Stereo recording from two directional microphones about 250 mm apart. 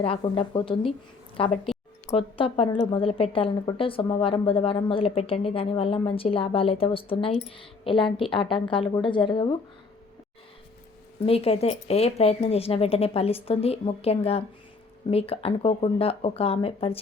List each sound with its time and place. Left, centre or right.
0.0 s a woman's voice: left
11.2 s a woman's voice: left